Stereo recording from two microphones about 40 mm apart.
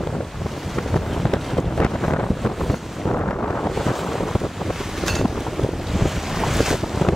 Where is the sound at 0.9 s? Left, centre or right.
Centre.